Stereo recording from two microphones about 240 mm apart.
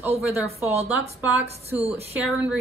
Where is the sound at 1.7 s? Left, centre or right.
Right.